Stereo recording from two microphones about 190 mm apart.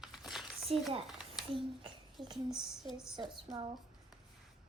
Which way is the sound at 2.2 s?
Centre (ahead or behind).